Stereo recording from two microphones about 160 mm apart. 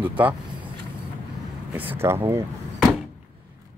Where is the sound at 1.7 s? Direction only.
10° right (ahead or behind).